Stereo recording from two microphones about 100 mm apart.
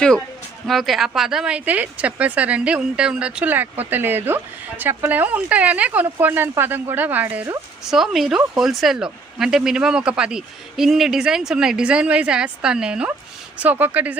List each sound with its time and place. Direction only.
0.7 s a man's voice: centre (ahead or behind); by 7.4 s 15° right (ahead or behind)
7.9 s a man's voice: 5° right (ahead or behind)